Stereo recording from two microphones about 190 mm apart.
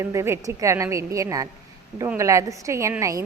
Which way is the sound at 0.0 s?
15° right (ahead or behind).